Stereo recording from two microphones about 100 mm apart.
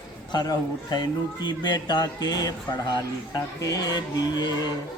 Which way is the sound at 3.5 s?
40° left (ahead or behind).